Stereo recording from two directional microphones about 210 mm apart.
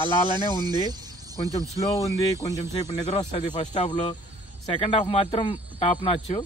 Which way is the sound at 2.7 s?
30° left (ahead or behind).